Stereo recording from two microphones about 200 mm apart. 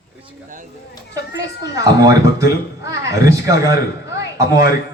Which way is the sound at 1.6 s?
15° right (ahead or behind).